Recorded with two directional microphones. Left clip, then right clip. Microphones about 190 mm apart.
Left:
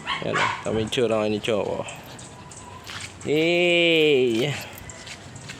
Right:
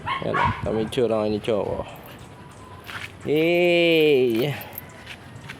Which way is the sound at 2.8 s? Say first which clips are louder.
Right 2 dB; 20° right (ahead or behind).